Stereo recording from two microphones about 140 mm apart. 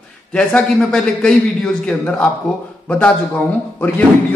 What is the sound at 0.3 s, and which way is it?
A man's voice, 10° left (ahead or behind).